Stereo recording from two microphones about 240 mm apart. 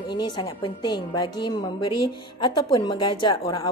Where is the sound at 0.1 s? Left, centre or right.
Centre.